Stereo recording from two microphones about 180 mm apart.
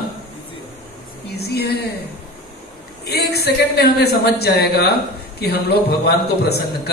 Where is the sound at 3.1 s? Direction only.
65° left (ahead or behind).